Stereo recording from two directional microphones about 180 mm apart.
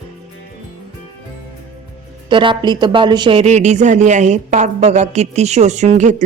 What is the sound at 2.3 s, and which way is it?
Speech, 25° right (ahead or behind).